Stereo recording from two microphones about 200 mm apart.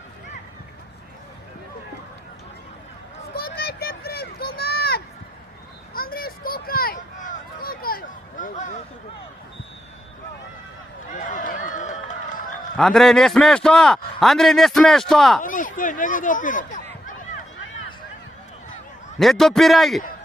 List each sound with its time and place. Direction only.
3.3 s a sound: 50° left (ahead or behind)
11.1 s run: 40° left (ahead or behind)
12.7 s a man's voice: centre (ahead or behind)
15.4 s speech: 40° left (ahead or behind)
19.2 s a man's voice: centre (ahead or behind)